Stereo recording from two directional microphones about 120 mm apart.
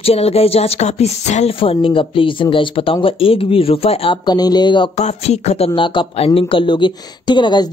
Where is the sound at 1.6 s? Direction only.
50° left (ahead or behind).